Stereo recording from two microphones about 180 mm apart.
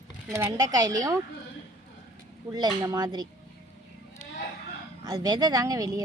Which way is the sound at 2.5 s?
20° right (ahead or behind).